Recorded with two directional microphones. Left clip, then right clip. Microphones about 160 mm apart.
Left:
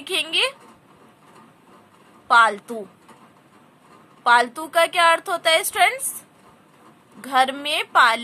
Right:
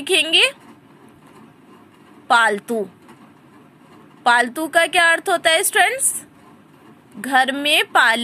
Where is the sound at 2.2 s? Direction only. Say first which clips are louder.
Even; 25° right (ahead or behind).